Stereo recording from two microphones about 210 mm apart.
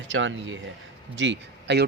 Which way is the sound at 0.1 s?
60° right (ahead or behind).